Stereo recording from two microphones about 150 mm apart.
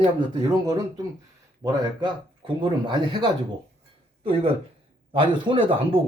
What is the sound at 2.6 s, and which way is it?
Speech, 30° right (ahead or behind).